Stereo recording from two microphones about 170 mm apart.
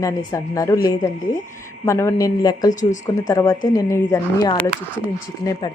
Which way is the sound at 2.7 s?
45° left (ahead or behind).